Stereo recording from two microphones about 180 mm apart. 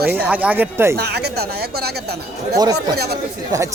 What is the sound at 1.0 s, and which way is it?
Speech, 65° right (ahead or behind).